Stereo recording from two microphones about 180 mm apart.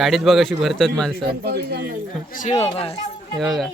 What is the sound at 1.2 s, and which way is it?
Speech, 60° right (ahead or behind).